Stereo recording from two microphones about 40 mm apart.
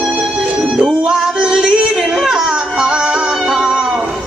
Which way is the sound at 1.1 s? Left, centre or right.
Centre.